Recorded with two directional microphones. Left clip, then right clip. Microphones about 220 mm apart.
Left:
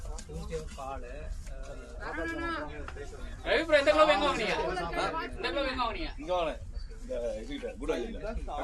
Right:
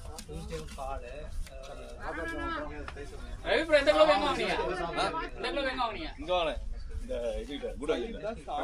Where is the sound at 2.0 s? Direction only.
50° left (ahead or behind).